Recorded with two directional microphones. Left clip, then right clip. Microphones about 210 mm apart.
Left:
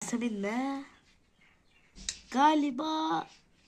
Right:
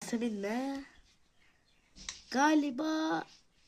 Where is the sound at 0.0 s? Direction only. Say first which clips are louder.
Left 2 dB; 25° right (ahead or behind).